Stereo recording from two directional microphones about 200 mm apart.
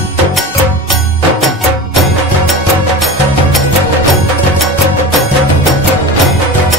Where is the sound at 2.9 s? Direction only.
Centre (ahead or behind).